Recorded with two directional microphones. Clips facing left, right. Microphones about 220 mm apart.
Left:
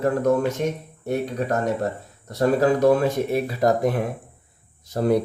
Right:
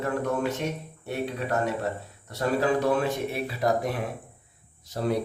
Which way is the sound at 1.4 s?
45° left (ahead or behind).